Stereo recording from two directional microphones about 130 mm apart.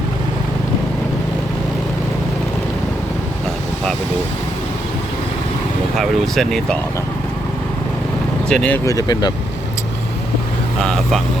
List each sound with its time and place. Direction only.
6.0 s speech: centre (ahead or behind)
8.4 s speech: 5° left (ahead or behind)
8.8 s speech: 25° left (ahead or behind)
10.8 s speech: 5° left (ahead or behind)